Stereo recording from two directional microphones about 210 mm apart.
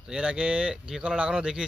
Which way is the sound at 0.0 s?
5° right (ahead or behind).